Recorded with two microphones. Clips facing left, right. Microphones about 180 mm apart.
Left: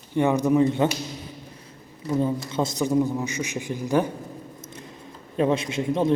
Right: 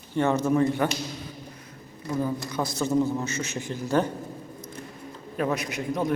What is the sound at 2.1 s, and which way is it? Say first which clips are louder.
A man's voice: left 4 dB; 20° left (ahead or behind).